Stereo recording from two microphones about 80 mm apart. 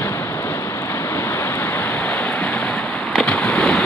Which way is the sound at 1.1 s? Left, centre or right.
Left.